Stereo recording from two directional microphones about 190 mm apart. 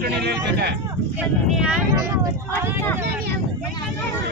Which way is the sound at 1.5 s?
5° right (ahead or behind).